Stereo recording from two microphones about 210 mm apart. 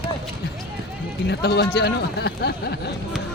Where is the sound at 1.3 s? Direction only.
50° left (ahead or behind).